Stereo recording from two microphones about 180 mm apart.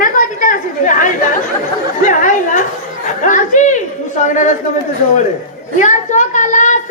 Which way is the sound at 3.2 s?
45° left (ahead or behind).